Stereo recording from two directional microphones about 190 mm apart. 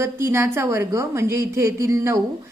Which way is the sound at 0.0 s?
15° right (ahead or behind).